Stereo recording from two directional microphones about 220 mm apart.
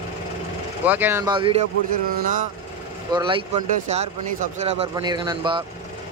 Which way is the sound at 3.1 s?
20° right (ahead or behind).